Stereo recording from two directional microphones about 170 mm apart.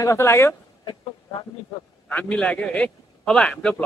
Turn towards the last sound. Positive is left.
turn(degrees=5)  # may be behind; listen again after turning